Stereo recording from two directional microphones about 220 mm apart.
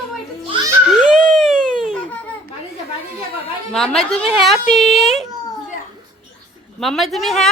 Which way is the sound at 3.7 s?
Centre (ahead or behind).